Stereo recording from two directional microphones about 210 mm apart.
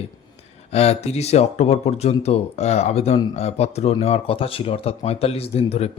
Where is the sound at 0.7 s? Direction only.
30° left (ahead or behind).